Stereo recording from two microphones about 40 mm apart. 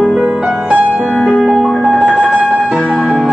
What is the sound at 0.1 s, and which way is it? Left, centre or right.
Music, centre.